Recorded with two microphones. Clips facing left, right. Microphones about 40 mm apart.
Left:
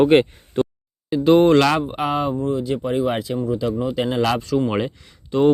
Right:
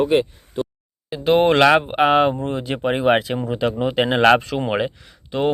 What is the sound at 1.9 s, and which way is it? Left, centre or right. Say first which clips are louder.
Speech: right 6 dB; right.